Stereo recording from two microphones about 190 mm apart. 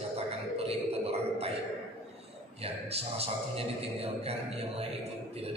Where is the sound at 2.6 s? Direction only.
30° right (ahead or behind).